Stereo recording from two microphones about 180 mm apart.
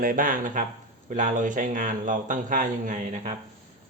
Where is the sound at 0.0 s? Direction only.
50° right (ahead or behind).